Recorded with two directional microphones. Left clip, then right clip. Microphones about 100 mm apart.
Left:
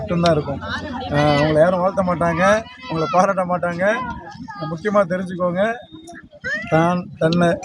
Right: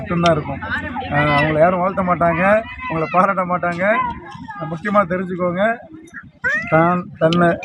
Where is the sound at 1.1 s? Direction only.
55° left (ahead or behind).